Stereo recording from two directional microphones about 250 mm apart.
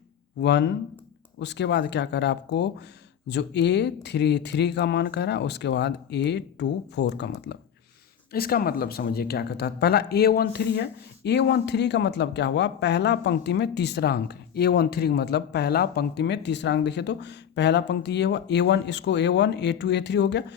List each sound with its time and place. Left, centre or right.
0.4 s speech: left